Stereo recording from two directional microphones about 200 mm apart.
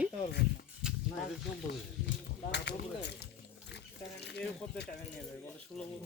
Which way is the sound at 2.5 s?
55° left (ahead or behind).